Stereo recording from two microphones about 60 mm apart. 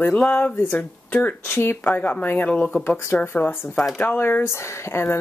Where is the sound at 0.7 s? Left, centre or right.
Left.